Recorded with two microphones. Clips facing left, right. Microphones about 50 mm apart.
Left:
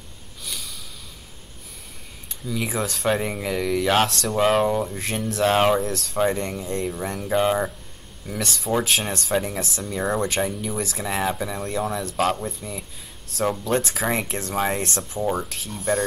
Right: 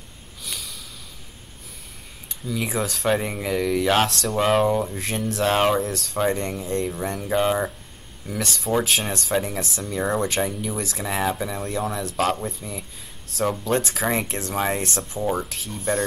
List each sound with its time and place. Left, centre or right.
0.4 s snort: centre
2.4 s speech: centre